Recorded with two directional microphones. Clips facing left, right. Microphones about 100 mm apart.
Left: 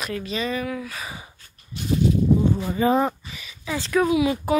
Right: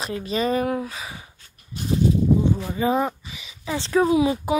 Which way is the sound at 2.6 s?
5° right (ahead or behind).